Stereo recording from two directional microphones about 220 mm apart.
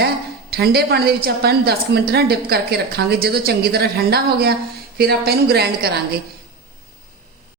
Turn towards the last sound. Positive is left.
turn(degrees=-45)  # may be behind; listen again after turning